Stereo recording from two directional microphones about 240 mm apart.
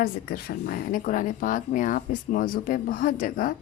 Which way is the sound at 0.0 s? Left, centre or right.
Left.